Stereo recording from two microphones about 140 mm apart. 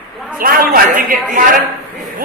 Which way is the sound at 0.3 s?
90° right.